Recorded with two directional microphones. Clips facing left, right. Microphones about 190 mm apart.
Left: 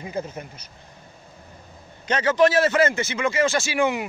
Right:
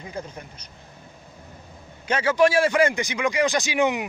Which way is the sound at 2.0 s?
10° right (ahead or behind).